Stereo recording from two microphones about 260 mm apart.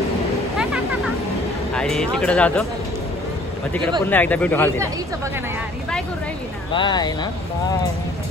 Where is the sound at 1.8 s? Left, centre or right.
Centre.